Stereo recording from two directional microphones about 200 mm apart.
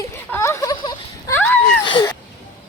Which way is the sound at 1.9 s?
25° left (ahead or behind).